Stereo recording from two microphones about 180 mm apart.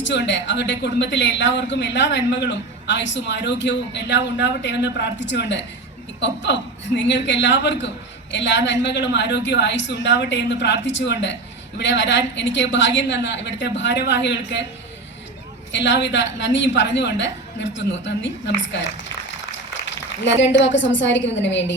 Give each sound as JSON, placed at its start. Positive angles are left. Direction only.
{"t": 0.0, "sound": "a woman's voice", "side_deg": 80}
{"t": 15.7, "sound": "a woman's voice", "side_deg": 80}
{"t": 20.2, "sound": "a woman's voice", "side_deg": 80}